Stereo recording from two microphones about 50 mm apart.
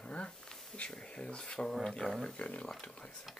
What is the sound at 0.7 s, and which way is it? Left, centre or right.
Speech, centre.